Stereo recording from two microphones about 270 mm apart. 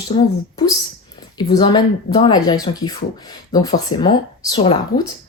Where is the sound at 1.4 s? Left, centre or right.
Centre.